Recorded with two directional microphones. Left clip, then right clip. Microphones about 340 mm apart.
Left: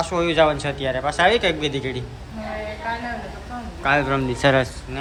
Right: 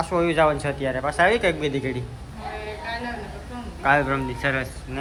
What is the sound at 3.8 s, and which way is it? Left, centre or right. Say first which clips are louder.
Speech: left 1 dB; centre.